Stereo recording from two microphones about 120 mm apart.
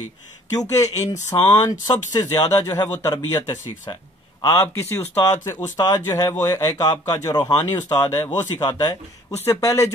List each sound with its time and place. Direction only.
0.6 s speech: 25° left (ahead or behind)
3.9 s a sound: 35° left (ahead or behind)
4.6 s speech: 20° left (ahead or behind)
8.5 s speech: 35° left (ahead or behind)
9.4 s speech: 25° left (ahead or behind)